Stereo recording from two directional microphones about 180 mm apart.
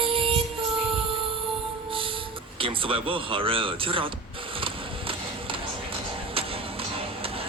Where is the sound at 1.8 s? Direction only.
30° right (ahead or behind).